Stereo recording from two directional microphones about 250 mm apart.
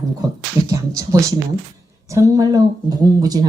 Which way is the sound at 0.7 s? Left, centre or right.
Centre.